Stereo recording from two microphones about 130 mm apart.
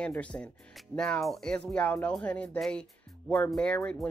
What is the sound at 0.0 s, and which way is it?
Speech, 10° left (ahead or behind).